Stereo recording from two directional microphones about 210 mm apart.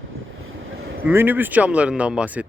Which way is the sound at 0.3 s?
75° right (ahead or behind).